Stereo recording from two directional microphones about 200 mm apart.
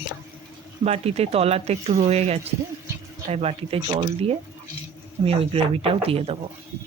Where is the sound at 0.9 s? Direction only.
30° right (ahead or behind).